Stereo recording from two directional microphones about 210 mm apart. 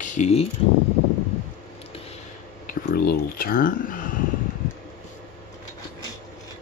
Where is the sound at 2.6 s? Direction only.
40° left (ahead or behind).